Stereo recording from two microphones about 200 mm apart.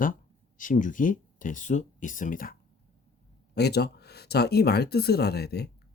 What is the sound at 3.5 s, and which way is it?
Speech, 55° left (ahead or behind).